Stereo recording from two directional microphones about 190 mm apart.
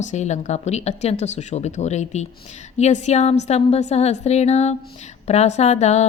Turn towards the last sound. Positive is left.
turn(degrees=35)  # may be behind; listen again after turning